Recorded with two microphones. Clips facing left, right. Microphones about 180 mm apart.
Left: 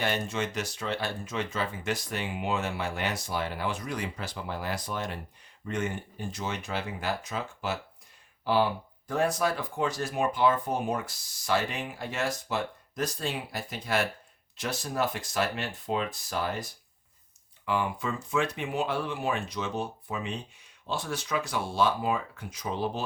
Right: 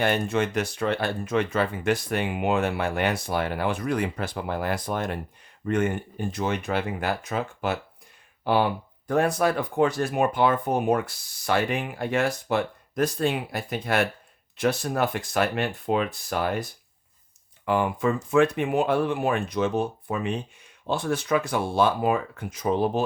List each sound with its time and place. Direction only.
0.0 s speech: 55° right (ahead or behind)
17.7 s speech: 50° right (ahead or behind)